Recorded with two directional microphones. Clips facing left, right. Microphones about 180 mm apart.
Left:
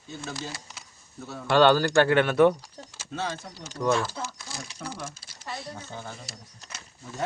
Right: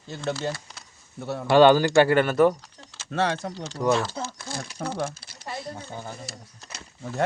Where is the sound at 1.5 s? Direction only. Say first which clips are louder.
Right 4 dB; 15° right (ahead or behind).